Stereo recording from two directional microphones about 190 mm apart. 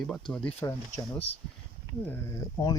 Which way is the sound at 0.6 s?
15° left (ahead or behind).